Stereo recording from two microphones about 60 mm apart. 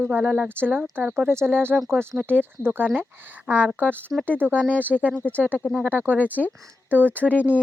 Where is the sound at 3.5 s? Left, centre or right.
Left.